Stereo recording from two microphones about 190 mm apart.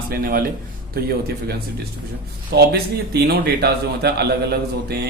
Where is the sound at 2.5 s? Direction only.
55° right (ahead or behind).